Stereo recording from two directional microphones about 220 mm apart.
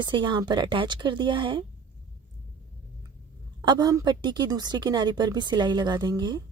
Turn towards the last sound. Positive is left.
turn(degrees=-20)  # may be behind; listen again after turning